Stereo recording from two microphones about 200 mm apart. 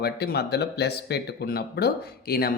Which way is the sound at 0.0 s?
55° left (ahead or behind).